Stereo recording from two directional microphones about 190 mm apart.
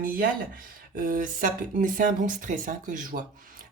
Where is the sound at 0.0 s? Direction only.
50° right (ahead or behind).